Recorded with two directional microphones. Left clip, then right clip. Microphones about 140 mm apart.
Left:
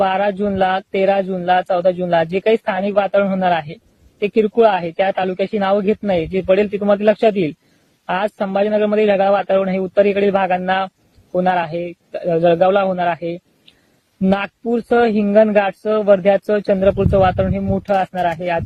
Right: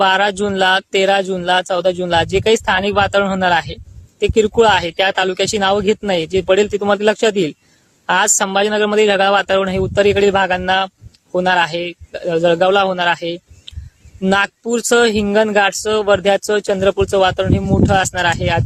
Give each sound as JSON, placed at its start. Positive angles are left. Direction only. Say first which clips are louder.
{"t": 0.0, "sound": "speech", "louder": "right 3 dB", "side_deg": -40}